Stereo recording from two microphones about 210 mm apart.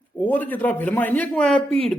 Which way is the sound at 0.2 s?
10° left (ahead or behind).